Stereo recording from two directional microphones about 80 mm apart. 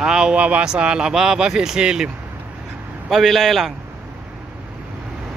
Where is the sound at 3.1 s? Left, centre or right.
Centre.